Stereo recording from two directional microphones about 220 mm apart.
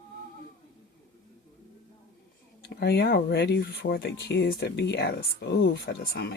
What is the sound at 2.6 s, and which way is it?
Speech, 45° left (ahead or behind).